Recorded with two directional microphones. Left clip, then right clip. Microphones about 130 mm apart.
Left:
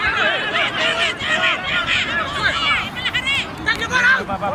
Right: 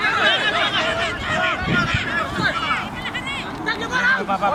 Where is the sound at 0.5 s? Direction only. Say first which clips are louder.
Left 1 dB; 15° left (ahead or behind).